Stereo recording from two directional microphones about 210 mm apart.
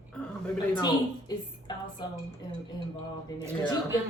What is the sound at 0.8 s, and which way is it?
Speech, 20° left (ahead or behind).